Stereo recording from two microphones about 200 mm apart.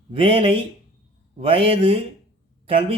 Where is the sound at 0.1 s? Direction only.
25° right (ahead or behind).